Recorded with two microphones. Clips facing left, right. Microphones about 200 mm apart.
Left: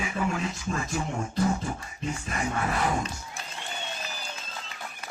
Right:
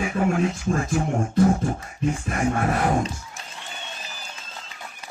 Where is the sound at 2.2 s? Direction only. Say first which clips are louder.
Right 5 dB; 50° right (ahead or behind).